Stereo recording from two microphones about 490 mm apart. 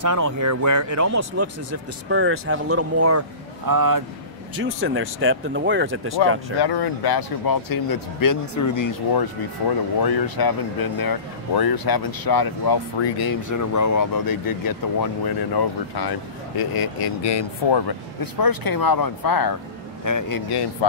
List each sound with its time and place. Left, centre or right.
0.0 s speech: right
4.6 s speech: right
6.6 s a man's voice: left